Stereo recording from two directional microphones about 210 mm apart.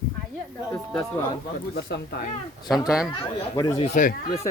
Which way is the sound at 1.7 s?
50° left (ahead or behind).